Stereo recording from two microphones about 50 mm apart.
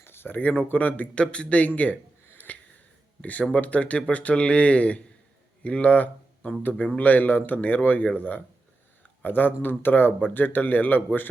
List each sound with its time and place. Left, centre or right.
0.0 s a sound: left
0.3 s speech: left
1.2 s speech: left
2.5 s finger snapping: left
3.2 s speech: left